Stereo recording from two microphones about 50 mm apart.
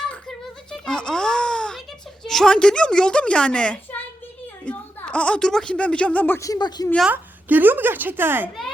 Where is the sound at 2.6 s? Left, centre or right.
Centre.